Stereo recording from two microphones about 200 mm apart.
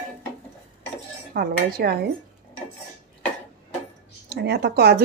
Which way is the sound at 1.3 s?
50° right (ahead or behind).